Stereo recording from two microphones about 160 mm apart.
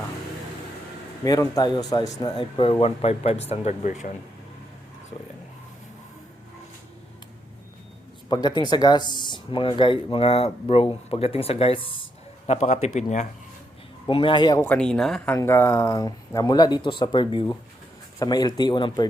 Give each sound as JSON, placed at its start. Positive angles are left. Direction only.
{"t": 1.2, "sound": "a man's voice", "side_deg": 20}
{"t": 8.3, "sound": "speech", "side_deg": 25}
{"t": 12.5, "sound": "a man's voice", "side_deg": 45}
{"t": 14.1, "sound": "speech", "side_deg": 30}
{"t": 14.6, "sound": "speech", "side_deg": 5}
{"t": 15.4, "sound": "speech", "side_deg": 15}